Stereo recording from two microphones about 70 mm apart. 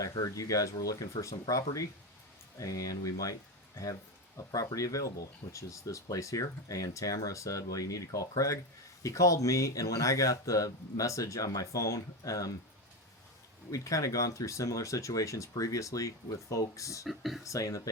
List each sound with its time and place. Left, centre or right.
0.3 s speech: left
4.4 s speech: left
13.7 s speech: left
17.1 s speech: centre
17.4 s speech: left